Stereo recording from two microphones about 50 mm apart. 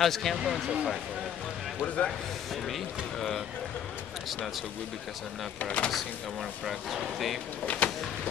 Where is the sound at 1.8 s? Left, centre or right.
Left.